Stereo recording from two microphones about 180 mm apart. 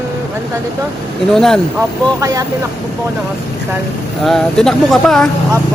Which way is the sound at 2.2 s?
20° right (ahead or behind).